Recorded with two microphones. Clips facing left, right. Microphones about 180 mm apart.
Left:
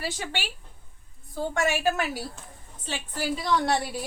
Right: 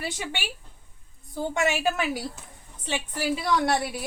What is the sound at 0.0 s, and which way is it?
Speech, 15° right (ahead or behind).